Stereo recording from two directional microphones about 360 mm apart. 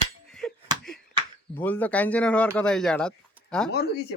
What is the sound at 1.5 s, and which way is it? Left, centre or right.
Speech, centre.